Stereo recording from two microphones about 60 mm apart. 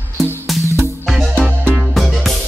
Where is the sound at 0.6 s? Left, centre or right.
Right.